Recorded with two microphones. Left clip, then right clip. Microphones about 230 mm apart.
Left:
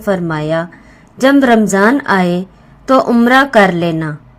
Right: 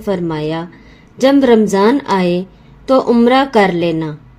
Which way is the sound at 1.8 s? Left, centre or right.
Centre.